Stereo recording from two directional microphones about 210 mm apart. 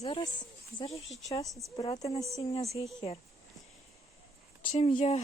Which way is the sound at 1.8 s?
15° left (ahead or behind).